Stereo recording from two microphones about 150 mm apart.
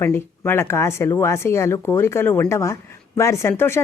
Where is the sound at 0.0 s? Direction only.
15° left (ahead or behind).